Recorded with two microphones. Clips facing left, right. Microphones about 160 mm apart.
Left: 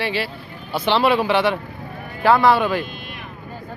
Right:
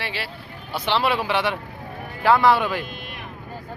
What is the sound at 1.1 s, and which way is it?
Speech, 10° right (ahead or behind).